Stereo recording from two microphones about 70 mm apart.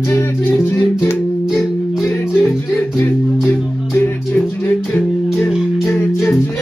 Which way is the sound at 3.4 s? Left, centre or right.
Left.